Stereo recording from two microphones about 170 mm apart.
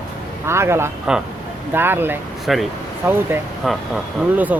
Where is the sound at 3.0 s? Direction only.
15° right (ahead or behind).